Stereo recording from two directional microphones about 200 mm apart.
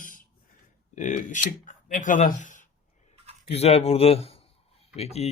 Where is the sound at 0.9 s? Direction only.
40° left (ahead or behind).